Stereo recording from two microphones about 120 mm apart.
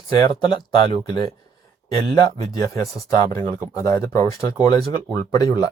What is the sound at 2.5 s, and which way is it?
Speech, 25° left (ahead or behind).